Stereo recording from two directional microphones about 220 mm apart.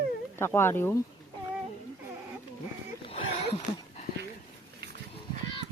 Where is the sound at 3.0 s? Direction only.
25° left (ahead or behind).